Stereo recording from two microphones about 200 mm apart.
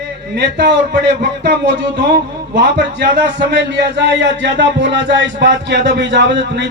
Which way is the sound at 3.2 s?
60° right (ahead or behind).